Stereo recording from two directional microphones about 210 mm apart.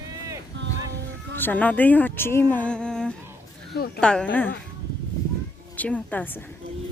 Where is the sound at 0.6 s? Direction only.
55° right (ahead or behind).